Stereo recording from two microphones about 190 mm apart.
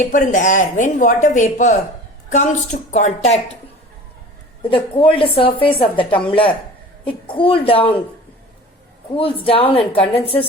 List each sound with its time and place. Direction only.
0.0 s speech: 40° left (ahead or behind)
4.7 s a woman's voice: 25° left (ahead or behind)
9.1 s a woman's voice: 30° left (ahead or behind)